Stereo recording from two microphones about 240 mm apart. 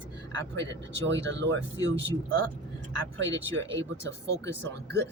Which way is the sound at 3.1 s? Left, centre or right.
Right.